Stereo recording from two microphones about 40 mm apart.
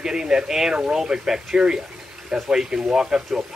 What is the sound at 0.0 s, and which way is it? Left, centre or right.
Speech, centre.